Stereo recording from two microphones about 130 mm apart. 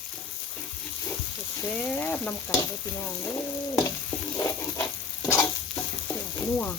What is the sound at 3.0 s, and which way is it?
Frying, 20° left (ahead or behind).